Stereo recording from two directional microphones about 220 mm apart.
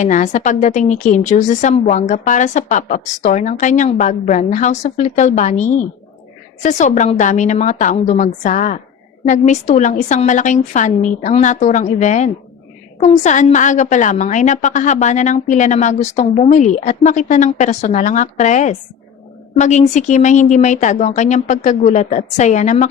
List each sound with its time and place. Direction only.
0.0 s a woman's voice: 35° left (ahead or behind)